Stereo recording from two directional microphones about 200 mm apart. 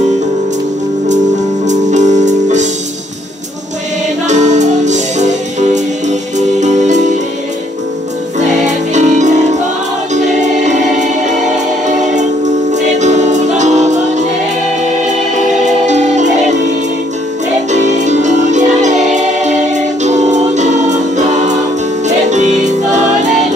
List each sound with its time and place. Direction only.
1.7 s music: 35° right (ahead or behind)
4.3 s music: 35° right (ahead or behind)
8.4 s music: 35° right (ahead or behind)
17.6 s music: 35° right (ahead or behind)
22.0 s music: 35° right (ahead or behind)